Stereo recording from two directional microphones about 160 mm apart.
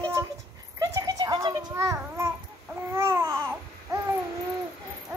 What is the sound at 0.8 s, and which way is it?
Babbling, 20° right (ahead or behind).